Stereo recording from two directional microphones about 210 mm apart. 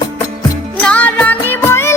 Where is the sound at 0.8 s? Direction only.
5° left (ahead or behind).